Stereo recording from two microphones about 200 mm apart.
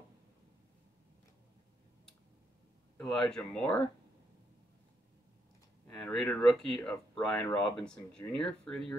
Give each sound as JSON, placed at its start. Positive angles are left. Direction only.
{"t": 3.0, "sound": "speech", "side_deg": 5}
{"t": 5.9, "sound": "speech", "side_deg": 5}